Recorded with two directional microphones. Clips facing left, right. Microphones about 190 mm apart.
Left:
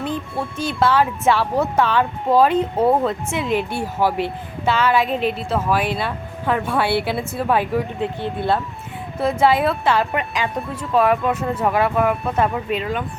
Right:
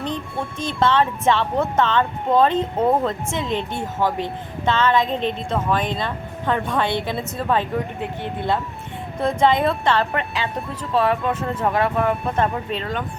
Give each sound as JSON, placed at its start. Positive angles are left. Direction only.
{"t": 0.0, "sound": "speech", "side_deg": 5}
{"t": 8.2, "sound": "speech", "side_deg": -15}
{"t": 9.1, "sound": "speech", "side_deg": 5}